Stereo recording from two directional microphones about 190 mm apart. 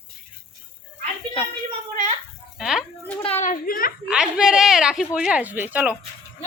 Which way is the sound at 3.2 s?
35° left (ahead or behind).